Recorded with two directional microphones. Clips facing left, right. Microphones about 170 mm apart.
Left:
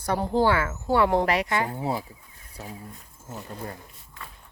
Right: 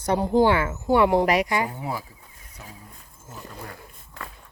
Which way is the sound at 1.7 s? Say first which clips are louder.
Left 3 dB; 30° left (ahead or behind).